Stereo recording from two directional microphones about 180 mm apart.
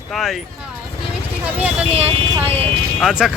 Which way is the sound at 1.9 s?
35° right (ahead or behind).